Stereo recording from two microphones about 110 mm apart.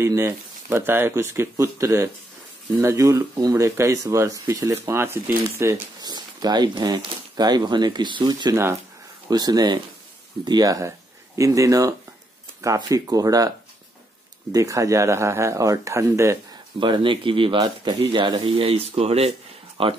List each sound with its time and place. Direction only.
0.0 s speech: 25° right (ahead or behind)
5.9 s speech: 40° right (ahead or behind)
14.5 s speech: 30° right (ahead or behind)
16.8 s speech: 45° right (ahead or behind); by 19.3 s 65° right (ahead or behind)
19.8 s speech: 55° right (ahead or behind)